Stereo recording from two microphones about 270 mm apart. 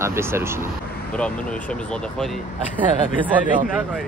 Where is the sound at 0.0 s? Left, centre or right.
Centre.